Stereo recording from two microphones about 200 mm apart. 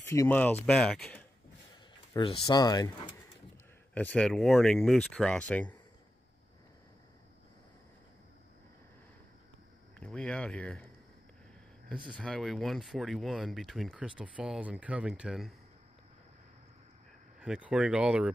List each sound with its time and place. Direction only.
0.0 s speech: 15° left (ahead or behind)
2.1 s speech: 25° left (ahead or behind)
3.9 s speech: 5° left (ahead or behind)
9.9 s speech: 5° left (ahead or behind)
12.2 s speech: centre (ahead or behind)
17.4 s speech: 5° right (ahead or behind)